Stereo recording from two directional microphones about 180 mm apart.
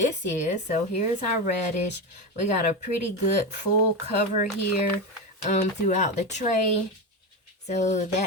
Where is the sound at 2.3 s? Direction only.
40° left (ahead or behind).